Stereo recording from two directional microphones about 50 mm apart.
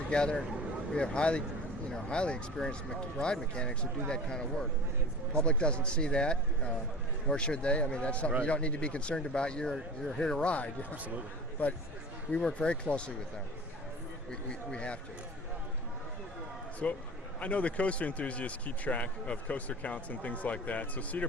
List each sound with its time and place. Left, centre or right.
0.1 s speech: centre
5.5 s speech: left
12.3 s speech: left
14.3 s speech: left
16.8 s speech: left